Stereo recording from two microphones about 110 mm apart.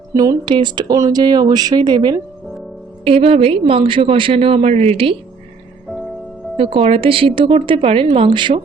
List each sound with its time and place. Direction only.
0.1 s speech: 30° right (ahead or behind)
0.4 s speech: 45° right (ahead or behind)
3.0 s a woman's voice: 60° right (ahead or behind)
6.6 s a woman's voice: 55° right (ahead or behind)